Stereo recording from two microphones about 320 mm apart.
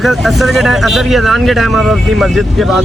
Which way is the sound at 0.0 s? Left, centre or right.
Centre.